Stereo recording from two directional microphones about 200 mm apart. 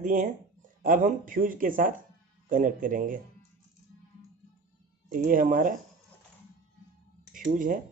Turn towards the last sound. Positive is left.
turn(degrees=-40)  # may be behind; listen again after turning